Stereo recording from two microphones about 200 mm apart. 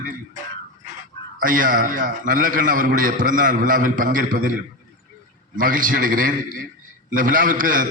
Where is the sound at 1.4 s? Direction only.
40° right (ahead or behind).